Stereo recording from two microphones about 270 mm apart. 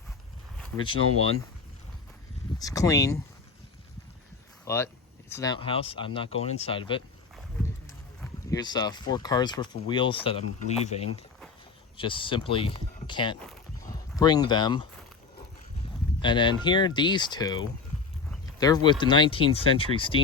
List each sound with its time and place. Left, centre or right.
2.6 s speech: centre
4.6 s speech: centre
8.2 s speech: centre
16.2 s speech: centre
18.6 s speech: centre